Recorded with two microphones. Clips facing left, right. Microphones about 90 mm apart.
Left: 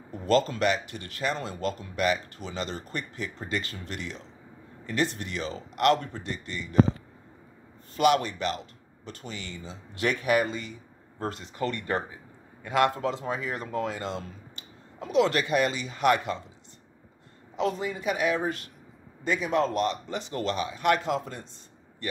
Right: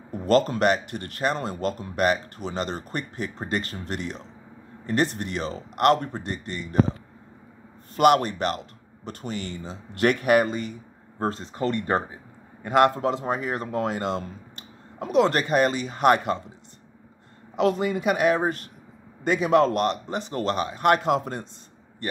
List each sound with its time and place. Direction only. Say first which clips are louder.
0.1 s speech: right 3 dB; 50° right (ahead or behind)
7.9 s speech: right 4 dB; 50° right (ahead or behind)
11.1 s speech: right 4 dB; 35° right (ahead or behind)
12.6 s speech: right 5 dB; 45° right (ahead or behind)
17.6 s speech: right 6 dB; 65° right (ahead or behind); by 18.7 s 45° right (ahead or behind)
19.2 s speech: right 6 dB; 65° right (ahead or behind)